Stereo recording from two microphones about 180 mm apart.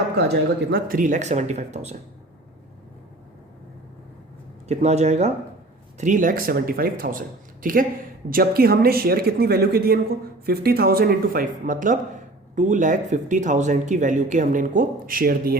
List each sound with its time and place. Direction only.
0.2 s speech: 70° right (ahead or behind); by 2.0 s 40° right (ahead or behind)
4.7 s speech: 40° right (ahead or behind); by 15.5 s 55° right (ahead or behind)